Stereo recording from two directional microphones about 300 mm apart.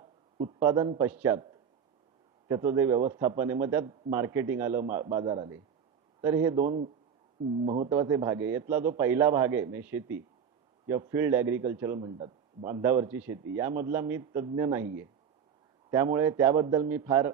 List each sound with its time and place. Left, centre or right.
0.0 s a man's voice: centre
6.6 s a man's voice: right